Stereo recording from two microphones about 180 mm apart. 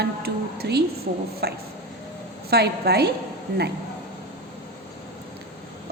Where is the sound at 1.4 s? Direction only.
65° right (ahead or behind).